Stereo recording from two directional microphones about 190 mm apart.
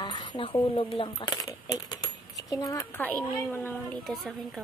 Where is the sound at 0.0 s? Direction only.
25° left (ahead or behind).